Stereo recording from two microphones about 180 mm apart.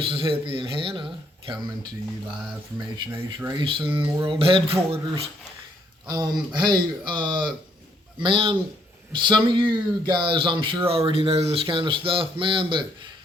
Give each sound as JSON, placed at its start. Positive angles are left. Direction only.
{"t": 0.1, "sound": "speech", "side_deg": -30}
{"t": 2.7, "sound": "speech", "side_deg": -15}